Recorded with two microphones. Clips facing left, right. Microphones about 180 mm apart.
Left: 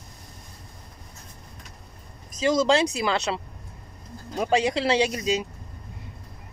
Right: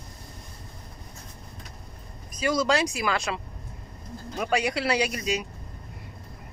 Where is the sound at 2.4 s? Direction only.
25° left (ahead or behind).